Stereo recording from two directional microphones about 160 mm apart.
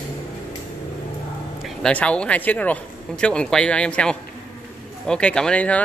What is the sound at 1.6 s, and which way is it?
Speech, 5° left (ahead or behind).